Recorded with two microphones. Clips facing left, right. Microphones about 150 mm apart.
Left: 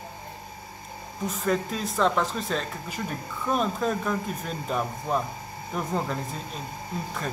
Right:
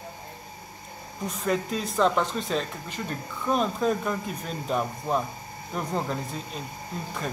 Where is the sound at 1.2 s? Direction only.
Centre (ahead or behind).